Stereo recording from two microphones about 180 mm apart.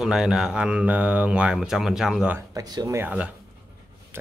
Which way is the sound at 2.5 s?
20° right (ahead or behind).